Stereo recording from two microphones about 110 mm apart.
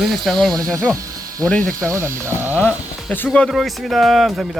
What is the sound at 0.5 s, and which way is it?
Speech, 30° right (ahead or behind).